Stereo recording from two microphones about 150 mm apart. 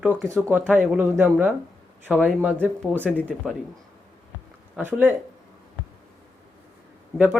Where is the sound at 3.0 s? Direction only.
10° left (ahead or behind).